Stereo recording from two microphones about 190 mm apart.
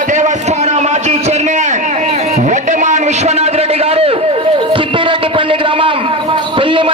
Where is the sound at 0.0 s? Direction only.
40° right (ahead or behind).